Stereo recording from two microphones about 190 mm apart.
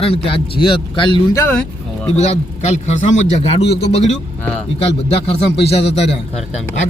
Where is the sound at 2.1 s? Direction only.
35° left (ahead or behind).